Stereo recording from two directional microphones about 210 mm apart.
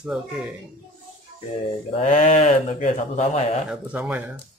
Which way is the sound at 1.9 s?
35° left (ahead or behind).